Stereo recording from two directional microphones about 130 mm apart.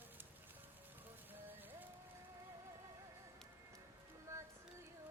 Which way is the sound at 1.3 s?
15° right (ahead or behind).